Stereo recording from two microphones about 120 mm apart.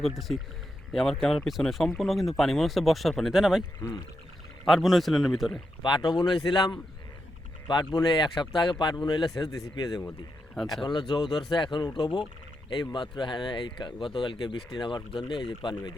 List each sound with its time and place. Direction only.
0.0 s speech: centre (ahead or behind)
4.6 s speech: centre (ahead or behind)
5.8 s speech: 40° left (ahead or behind)
7.9 s speech: 35° left (ahead or behind)
10.5 s speech: 5° left (ahead or behind)
10.8 s speech: 35° left (ahead or behind)